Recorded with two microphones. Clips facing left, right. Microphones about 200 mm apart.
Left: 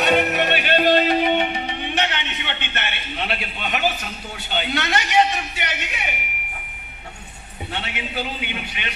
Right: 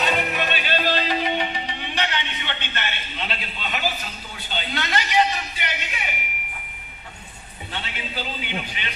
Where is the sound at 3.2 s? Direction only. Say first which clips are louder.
Left 4 dB; 60° left (ahead or behind).